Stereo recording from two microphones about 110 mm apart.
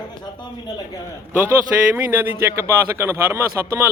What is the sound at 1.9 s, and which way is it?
A man's voice, 20° right (ahead or behind).